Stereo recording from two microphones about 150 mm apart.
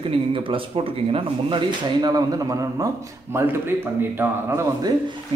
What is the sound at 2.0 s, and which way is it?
A man's voice, 25° right (ahead or behind).